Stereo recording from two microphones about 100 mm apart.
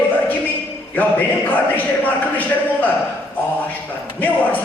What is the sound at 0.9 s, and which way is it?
A man's voice, 15° left (ahead or behind).